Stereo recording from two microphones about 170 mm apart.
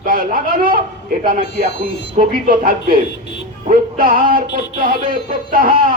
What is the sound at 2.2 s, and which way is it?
Speech, 55° right (ahead or behind).